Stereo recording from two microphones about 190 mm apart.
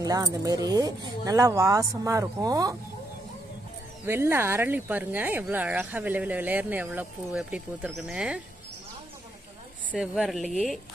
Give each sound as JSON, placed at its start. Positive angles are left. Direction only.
{"t": 0.0, "sound": "speech", "side_deg": -20}
{"t": 4.0, "sound": "speech", "side_deg": -15}
{"t": 9.9, "sound": "speech", "side_deg": 0}